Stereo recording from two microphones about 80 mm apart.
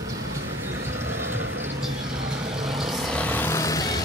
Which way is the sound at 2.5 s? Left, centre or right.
Centre.